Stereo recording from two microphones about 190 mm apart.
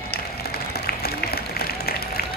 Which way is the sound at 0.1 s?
55° left (ahead or behind).